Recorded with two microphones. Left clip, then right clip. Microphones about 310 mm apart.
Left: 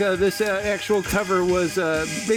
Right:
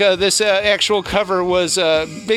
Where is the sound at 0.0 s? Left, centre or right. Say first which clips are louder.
Right 6 dB; centre.